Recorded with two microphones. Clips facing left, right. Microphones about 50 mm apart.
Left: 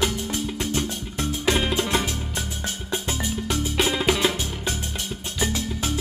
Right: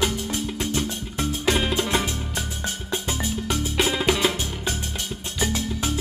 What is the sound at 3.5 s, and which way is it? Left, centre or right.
Music, centre.